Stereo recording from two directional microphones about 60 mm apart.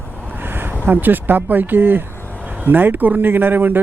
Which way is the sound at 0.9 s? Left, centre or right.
Right.